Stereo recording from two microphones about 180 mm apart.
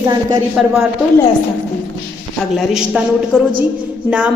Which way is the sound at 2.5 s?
Centre (ahead or behind).